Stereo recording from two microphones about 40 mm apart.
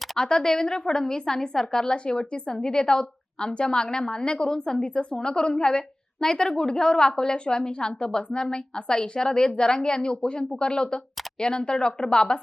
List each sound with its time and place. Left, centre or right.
0.2 s a woman's voice: centre